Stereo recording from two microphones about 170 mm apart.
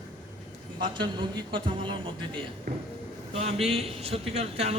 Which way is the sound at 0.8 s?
25° right (ahead or behind).